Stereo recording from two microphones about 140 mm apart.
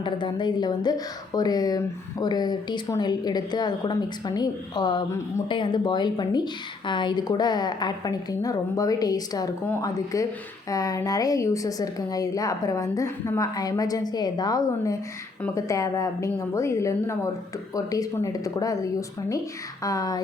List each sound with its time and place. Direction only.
0.0 s a woman's voice: 35° left (ahead or behind)